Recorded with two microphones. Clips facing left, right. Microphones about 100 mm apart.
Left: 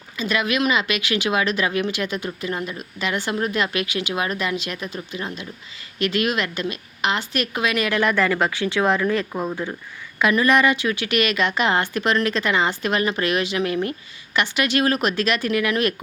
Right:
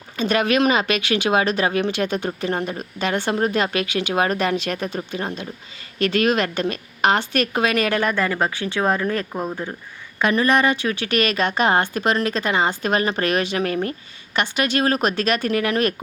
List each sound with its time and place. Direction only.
0.2 s speech: 40° right (ahead or behind)
3.3 s speech: 35° right (ahead or behind)
9.3 s speech: 10° right (ahead or behind)
10.2 s speech: 35° right (ahead or behind)